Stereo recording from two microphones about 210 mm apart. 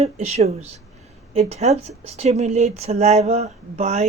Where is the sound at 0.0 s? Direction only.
30° right (ahead or behind).